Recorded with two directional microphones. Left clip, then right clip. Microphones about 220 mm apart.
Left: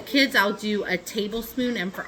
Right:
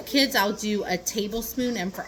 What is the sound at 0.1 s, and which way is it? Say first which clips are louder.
A woman's voice: left 2 dB; 10° left (ahead or behind).